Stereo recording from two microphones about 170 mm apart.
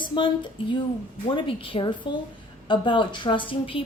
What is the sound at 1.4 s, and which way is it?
A woman's voice, 30° left (ahead or behind).